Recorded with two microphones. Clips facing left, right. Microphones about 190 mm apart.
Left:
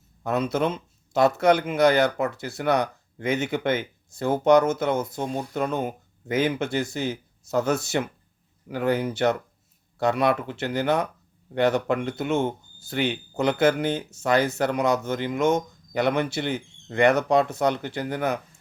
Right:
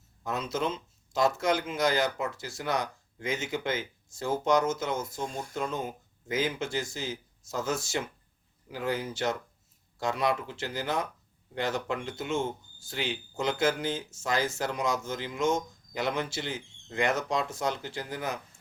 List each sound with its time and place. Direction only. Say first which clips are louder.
0.2 s speech: left 7 dB; 60° left (ahead or behind)